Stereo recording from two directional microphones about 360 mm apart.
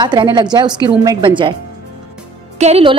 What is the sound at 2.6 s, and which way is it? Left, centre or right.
Speech, centre.